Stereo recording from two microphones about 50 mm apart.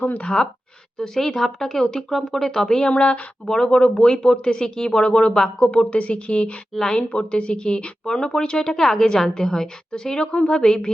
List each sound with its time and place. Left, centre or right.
0.0 s speech: left
0.9 s a woman's voice: centre
6.7 s a woman's voice: centre
7.1 s a woman's voice: left